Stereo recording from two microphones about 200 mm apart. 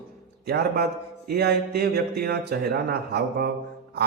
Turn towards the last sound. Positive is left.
turn(degrees=-50)  # may be behind; listen again after turning